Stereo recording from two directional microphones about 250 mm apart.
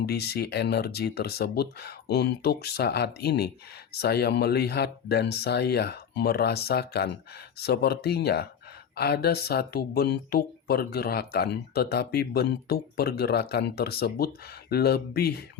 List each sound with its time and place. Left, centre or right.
0.0 s speech: left